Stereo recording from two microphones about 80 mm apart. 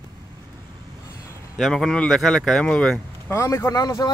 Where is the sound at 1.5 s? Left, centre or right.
Centre.